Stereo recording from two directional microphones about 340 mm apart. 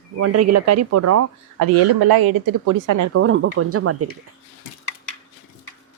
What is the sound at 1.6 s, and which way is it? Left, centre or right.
Speech, right.